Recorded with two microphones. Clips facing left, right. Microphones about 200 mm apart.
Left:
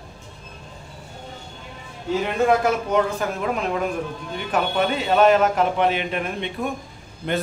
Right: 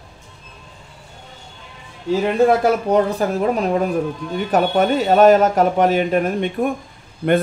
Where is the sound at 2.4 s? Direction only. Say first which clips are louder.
Right 3 dB; 35° right (ahead or behind).